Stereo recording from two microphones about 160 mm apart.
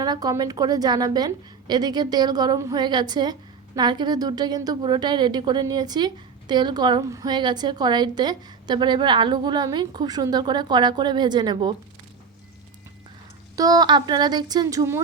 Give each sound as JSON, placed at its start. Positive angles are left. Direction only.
{"t": 0.0, "sound": "a woman's voice", "side_deg": -25}
{"t": 13.6, "sound": "a woman's voice", "side_deg": -25}